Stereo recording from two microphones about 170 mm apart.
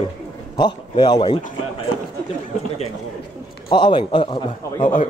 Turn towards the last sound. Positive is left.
turn(degrees=45)  # may be behind; listen again after turning